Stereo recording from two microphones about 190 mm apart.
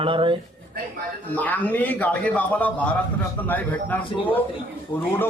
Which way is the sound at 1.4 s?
10° left (ahead or behind).